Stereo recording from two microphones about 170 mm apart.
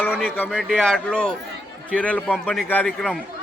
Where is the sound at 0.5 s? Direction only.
Centre (ahead or behind).